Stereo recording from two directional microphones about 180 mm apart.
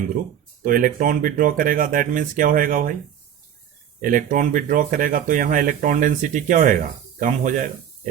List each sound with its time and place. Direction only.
0.6 s speech: 50° right (ahead or behind)
4.0 s speech: 50° right (ahead or behind)